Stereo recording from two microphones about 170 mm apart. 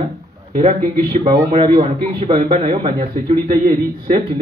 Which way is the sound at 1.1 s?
35° right (ahead or behind).